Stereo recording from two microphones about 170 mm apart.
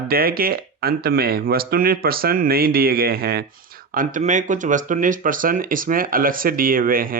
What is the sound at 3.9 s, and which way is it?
Speech, 50° right (ahead or behind).